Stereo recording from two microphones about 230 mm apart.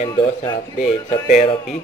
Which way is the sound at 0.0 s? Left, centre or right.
Centre.